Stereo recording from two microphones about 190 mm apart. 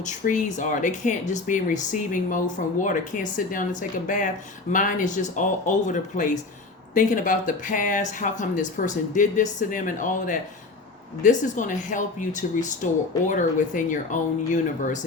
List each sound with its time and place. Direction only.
0.0 s speech: 40° left (ahead or behind)